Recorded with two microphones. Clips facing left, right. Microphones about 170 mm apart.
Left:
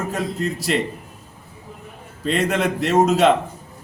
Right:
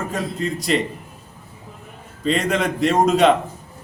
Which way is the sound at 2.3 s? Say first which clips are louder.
Even; 5° left (ahead or behind).